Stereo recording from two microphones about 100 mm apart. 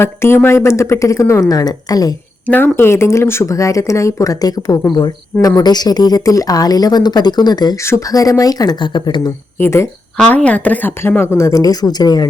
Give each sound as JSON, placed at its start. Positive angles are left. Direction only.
{"t": 0.0, "sound": "speech", "side_deg": 25}
{"t": 2.5, "sound": "speech", "side_deg": 20}
{"t": 7.8, "sound": "speech", "side_deg": 30}
{"t": 9.6, "sound": "speech", "side_deg": 25}
{"t": 10.2, "sound": "speech", "side_deg": 15}